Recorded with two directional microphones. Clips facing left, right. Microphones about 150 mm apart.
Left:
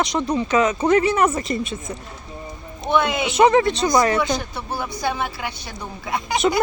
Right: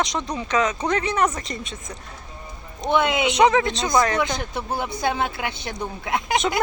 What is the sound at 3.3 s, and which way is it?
Speech, centre (ahead or behind).